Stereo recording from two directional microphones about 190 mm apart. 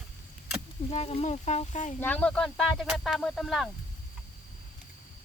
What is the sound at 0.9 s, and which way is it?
Speech, 35° left (ahead or behind).